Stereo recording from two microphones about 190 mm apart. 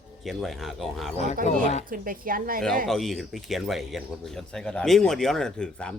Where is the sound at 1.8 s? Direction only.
45° right (ahead or behind).